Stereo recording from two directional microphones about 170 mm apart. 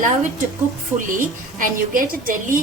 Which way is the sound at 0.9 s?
50° right (ahead or behind).